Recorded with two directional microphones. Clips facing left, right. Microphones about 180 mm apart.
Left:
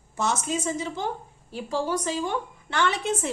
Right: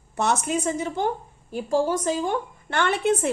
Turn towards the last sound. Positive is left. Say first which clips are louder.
# right 4 dB
turn(degrees=-60)  # may be behind; listen again after turning